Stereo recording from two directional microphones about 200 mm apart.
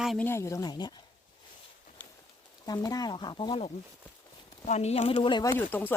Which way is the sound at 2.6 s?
20° left (ahead or behind).